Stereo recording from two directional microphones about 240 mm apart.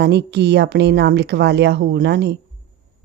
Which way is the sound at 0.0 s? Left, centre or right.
Right.